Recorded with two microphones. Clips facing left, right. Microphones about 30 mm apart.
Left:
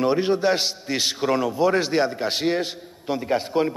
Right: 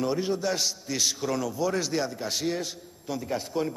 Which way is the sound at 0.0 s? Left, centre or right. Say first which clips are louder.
Left 7 dB; left.